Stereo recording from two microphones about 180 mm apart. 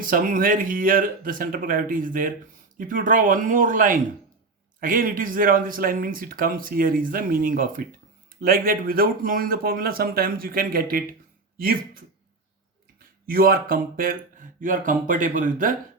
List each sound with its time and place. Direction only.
0.0 s speech: 50° right (ahead or behind)
13.2 s speech: 55° right (ahead or behind)